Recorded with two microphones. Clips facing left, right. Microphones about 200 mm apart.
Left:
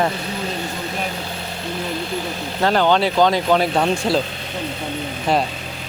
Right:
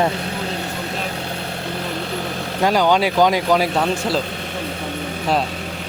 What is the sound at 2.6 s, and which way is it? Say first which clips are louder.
Speech: even; 10° right (ahead or behind).